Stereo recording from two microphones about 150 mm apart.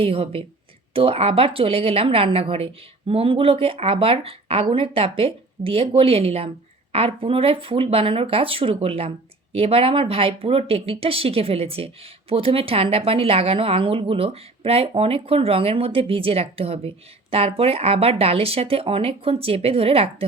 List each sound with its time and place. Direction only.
0.0 s speech: 40° right (ahead or behind)